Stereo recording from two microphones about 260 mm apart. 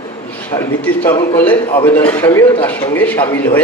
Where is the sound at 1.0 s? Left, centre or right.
Centre.